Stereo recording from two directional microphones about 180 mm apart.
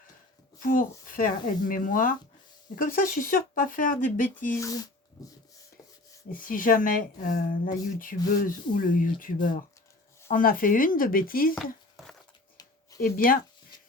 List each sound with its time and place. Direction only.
0.6 s speech: 50° left (ahead or behind)
4.4 s speech: 15° left (ahead or behind)
6.3 s speech: 50° left (ahead or behind)
13.0 s speech: 50° left (ahead or behind)